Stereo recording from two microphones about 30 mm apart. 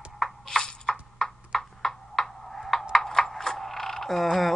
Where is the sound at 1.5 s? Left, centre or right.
Centre.